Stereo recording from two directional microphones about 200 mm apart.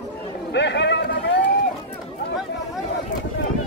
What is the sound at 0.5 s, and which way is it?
Run, 60° left (ahead or behind).